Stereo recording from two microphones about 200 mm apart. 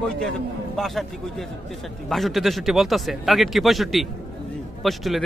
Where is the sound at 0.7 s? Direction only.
Centre (ahead or behind).